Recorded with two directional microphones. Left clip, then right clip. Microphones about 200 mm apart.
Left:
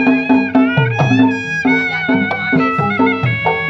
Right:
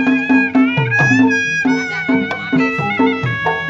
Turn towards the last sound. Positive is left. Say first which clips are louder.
# left 1 dB
turn(degrees=25)  # may be behind; listen again after turning